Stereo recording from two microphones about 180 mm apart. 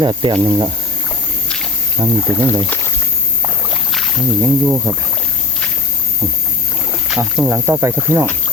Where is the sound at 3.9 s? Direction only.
Centre (ahead or behind).